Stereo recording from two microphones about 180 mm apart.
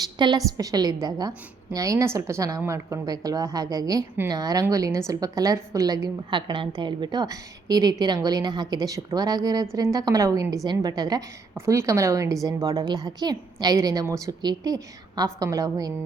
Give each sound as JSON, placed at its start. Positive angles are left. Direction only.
{"t": 0.2, "sound": "a woman's voice", "side_deg": -20}